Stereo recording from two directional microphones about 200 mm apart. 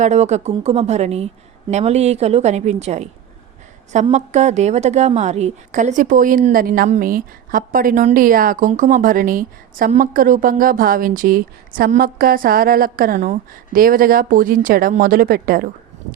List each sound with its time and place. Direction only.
0.0 s a woman's voice: 35° right (ahead or behind)